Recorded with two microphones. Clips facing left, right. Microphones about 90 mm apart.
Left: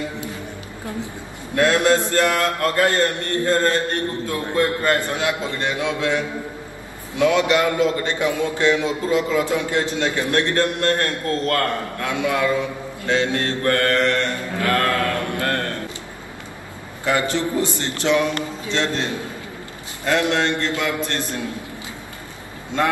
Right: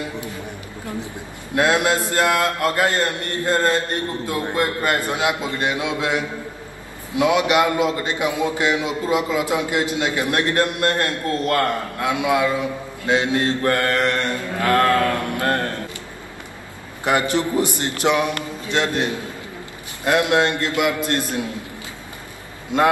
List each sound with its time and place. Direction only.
1.5 s a man's voice: 15° right (ahead or behind)
13.0 s mantra: 20° right (ahead or behind)
17.0 s a man's voice: 20° right (ahead or behind)